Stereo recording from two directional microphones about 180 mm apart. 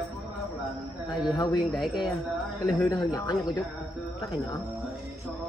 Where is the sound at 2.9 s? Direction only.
20° left (ahead or behind).